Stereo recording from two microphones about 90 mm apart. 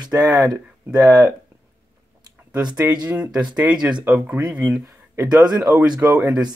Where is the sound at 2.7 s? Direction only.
55° right (ahead or behind).